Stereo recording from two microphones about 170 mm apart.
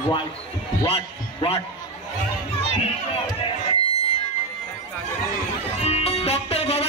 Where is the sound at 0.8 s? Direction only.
35° left (ahead or behind).